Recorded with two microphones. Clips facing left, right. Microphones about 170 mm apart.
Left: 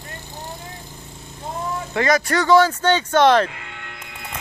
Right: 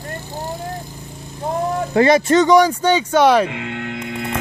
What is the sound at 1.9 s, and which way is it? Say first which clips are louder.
Speech: right 6 dB; 30° right (ahead or behind).